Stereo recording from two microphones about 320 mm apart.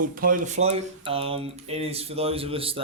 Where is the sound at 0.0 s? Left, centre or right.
Right.